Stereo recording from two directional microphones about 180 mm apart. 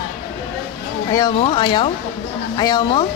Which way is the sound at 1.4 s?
25° left (ahead or behind).